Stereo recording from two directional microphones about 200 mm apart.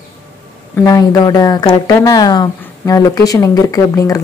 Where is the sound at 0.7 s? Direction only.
15° left (ahead or behind).